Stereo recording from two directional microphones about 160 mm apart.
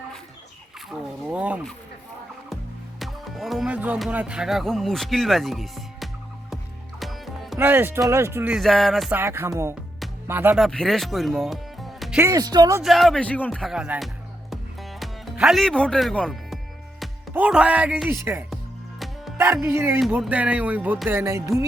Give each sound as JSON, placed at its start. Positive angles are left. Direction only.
{"t": 0.9, "sound": "speech", "side_deg": -5}
{"t": 3.0, "sound": "speech", "side_deg": 0}
{"t": 7.0, "sound": "music", "side_deg": 0}
{"t": 7.6, "sound": "music", "side_deg": -15}
{"t": 8.5, "sound": "speech", "side_deg": 0}
{"t": 9.1, "sound": "music", "side_deg": -15}
{"t": 10.6, "sound": "speech", "side_deg": 5}
{"t": 12.2, "sound": "speech", "side_deg": -20}
{"t": 12.8, "sound": "speech", "side_deg": 0}
{"t": 14.5, "sound": "music", "side_deg": 0}
{"t": 17.3, "sound": "music", "side_deg": -5}
{"t": 18.5, "sound": "music", "side_deg": 0}
{"t": 19.6, "sound": "music", "side_deg": -15}